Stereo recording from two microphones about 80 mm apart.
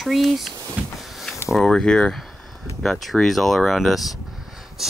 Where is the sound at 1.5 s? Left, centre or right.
Centre.